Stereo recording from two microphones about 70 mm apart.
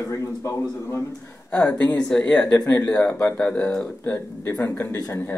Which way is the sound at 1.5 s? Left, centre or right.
Centre.